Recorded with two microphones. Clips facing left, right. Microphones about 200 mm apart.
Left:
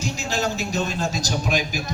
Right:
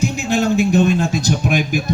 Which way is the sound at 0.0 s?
55° right (ahead or behind).